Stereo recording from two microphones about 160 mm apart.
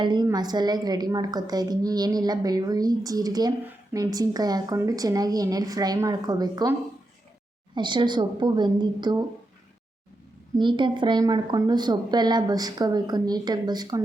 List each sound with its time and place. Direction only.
0.0 s a woman's voice: 30° right (ahead or behind)
7.8 s a woman's voice: 30° right (ahead or behind)
10.6 s a woman's voice: 30° right (ahead or behind)